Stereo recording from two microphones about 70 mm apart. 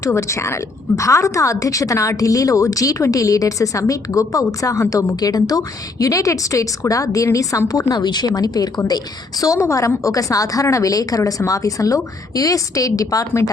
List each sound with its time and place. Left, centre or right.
0.0 s a woman's voice: left
7.7 s speech: left
9.4 s a woman's voice: left